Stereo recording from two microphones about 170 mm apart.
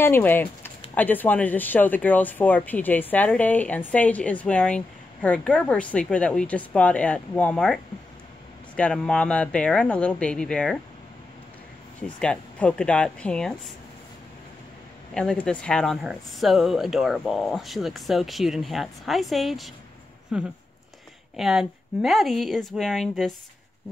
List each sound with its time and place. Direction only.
0.0 s speech: 15° left (ahead or behind)
12.2 s speech: 5° left (ahead or behind)
15.1 s speech: 5° left (ahead or behind)